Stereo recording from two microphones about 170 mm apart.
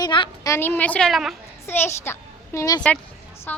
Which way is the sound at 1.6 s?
15° left (ahead or behind).